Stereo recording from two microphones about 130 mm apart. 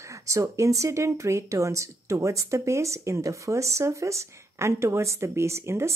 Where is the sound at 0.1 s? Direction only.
25° right (ahead or behind).